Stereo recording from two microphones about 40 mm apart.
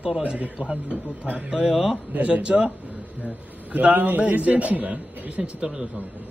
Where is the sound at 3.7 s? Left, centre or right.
Right.